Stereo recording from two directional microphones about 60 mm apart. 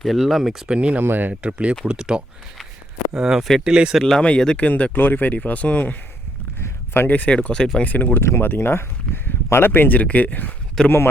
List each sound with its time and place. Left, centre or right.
0.0 s speech: centre
0.7 s speech: right
1.0 s speech: right
1.3 s speech: centre
4.2 s speech: centre
4.6 s speech: left
6.6 s a sound: left
7.1 s speech: left
7.9 s speech: left
8.2 s speech: left
10.8 s speech: left